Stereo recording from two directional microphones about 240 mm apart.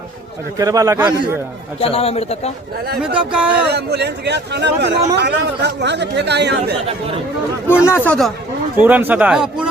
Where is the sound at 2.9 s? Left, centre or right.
Centre.